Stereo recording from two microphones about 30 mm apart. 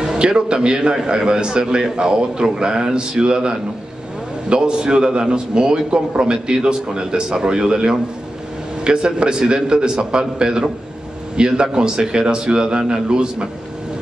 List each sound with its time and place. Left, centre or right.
0.0 s a man's voice: right